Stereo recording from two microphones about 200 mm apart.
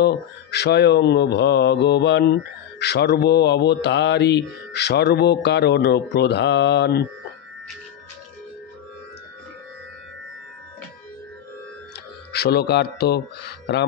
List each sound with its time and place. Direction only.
0.0 s speech: 55° left (ahead or behind)
11.9 s speech: 55° left (ahead or behind)